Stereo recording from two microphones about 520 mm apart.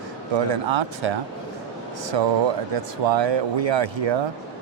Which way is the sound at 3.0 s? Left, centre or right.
Right.